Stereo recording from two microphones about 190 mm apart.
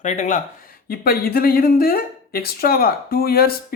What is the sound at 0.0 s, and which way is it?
Speech, 40° left (ahead or behind).